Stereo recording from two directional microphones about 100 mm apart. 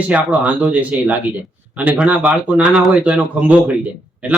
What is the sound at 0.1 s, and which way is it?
Speech, 15° right (ahead or behind).